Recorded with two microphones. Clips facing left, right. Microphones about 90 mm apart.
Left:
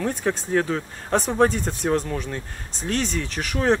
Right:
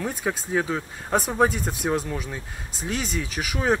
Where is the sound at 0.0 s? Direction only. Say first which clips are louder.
Left 3 dB; 10° right (ahead or behind).